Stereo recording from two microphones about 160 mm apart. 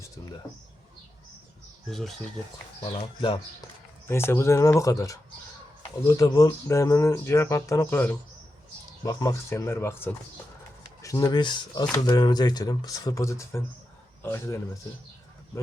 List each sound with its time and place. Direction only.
1.9 s speech: centre (ahead or behind)
2.8 s speech: 30° left (ahead or behind)
4.1 s speech: 15° left (ahead or behind)